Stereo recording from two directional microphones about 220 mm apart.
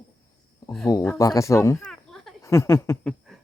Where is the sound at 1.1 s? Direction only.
15° left (ahead or behind).